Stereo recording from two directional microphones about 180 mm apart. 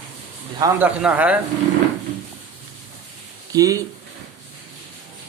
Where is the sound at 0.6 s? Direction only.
10° right (ahead or behind).